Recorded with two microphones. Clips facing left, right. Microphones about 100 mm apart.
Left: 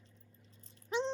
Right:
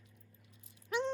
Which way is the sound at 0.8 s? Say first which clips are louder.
Even; 20° left (ahead or behind).